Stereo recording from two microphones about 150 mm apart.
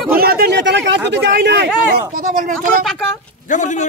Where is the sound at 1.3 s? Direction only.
90° right.